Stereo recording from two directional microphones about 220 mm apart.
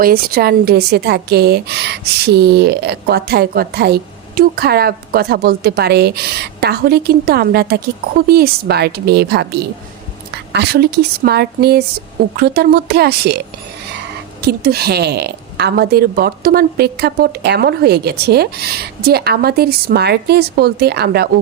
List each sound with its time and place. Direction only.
0.0 s a woman's voice: 45° right (ahead or behind)
14.4 s a woman's voice: 45° right (ahead or behind)